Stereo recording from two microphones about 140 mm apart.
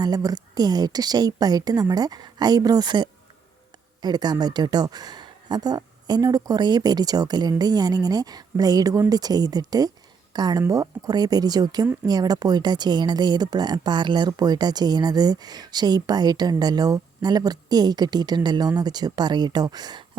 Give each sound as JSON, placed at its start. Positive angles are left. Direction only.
{"t": 0.0, "sound": "speech", "side_deg": -25}